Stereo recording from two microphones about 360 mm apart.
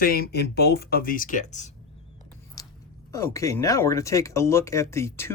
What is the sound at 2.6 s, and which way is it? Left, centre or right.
Chewing, centre.